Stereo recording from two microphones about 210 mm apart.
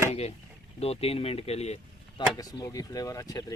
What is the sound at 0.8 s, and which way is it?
Speech, 30° left (ahead or behind).